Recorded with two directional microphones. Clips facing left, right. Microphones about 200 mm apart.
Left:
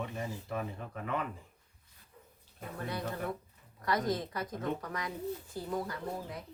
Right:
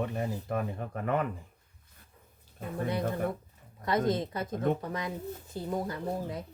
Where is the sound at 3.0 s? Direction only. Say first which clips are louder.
Right 5 dB; 50° right (ahead or behind).